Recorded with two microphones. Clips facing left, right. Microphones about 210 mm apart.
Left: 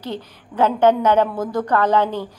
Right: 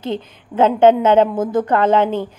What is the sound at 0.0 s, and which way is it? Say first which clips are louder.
A woman's voice: right 5 dB; 25° right (ahead or behind).